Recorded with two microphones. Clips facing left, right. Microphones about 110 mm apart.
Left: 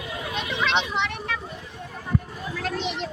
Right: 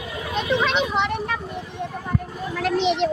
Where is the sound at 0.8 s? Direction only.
45° right (ahead or behind).